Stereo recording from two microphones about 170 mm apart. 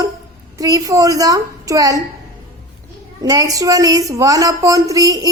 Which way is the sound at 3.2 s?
20° right (ahead or behind).